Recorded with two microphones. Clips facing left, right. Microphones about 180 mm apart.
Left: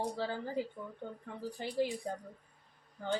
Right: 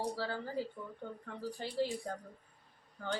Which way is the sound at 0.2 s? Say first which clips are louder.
Left 2 dB; 20° left (ahead or behind).